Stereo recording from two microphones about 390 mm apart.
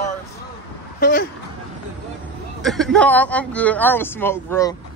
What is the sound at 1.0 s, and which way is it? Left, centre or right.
Speech, left.